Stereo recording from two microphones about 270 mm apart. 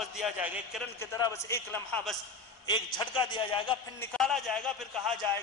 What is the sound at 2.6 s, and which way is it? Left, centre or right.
A man's voice, centre.